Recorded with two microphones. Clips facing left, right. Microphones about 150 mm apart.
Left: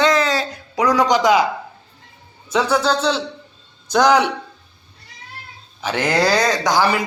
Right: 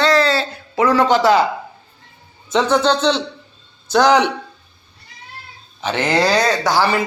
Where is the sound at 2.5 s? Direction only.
10° left (ahead or behind).